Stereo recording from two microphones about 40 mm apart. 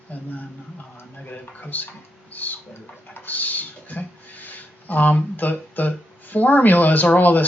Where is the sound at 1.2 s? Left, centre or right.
Left.